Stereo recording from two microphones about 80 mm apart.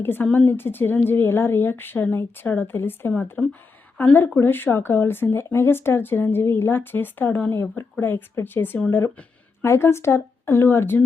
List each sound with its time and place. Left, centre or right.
0.0 s speech: left
3.4 s speech: centre
3.9 s speech: left
9.0 s a sound: centre
9.6 s speech: left